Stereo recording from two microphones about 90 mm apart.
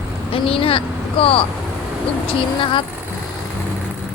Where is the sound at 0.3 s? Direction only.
90° left.